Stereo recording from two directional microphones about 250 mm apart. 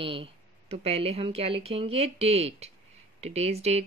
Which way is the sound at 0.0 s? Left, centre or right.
Right.